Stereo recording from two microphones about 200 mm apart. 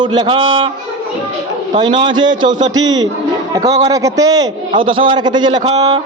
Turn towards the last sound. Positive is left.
turn(degrees=-20)  # may be behind; listen again after turning